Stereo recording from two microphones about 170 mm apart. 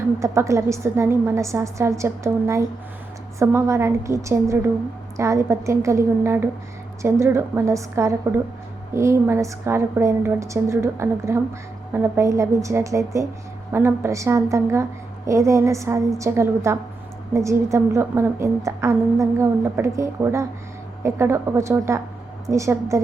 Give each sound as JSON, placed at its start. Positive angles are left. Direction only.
{"t": 0.2, "sound": "a woman's voice", "side_deg": -15}